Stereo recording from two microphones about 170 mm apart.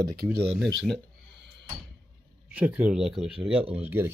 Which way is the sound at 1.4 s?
90° right.